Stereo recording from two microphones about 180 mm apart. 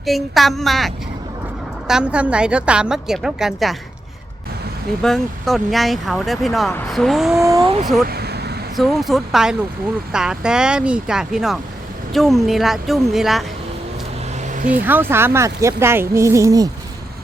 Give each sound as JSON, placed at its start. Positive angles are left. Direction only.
{"t": 0.0, "sound": "a woman's voice", "side_deg": 0}
{"t": 5.0, "sound": "a woman's voice", "side_deg": 0}
{"t": 7.3, "sound": "speech", "side_deg": -15}
{"t": 7.6, "sound": "speech", "side_deg": -30}
{"t": 8.0, "sound": "a sound", "side_deg": -60}
{"t": 8.7, "sound": "a woman's voice", "side_deg": 0}
{"t": 14.4, "sound": "vehicle", "side_deg": -45}
{"t": 14.7, "sound": "speech", "side_deg": -10}